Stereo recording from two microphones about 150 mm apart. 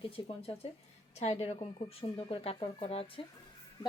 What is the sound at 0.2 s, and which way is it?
Speech, 35° left (ahead or behind).